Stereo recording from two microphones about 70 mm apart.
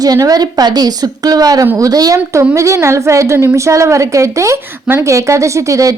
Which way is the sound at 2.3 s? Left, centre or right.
Right.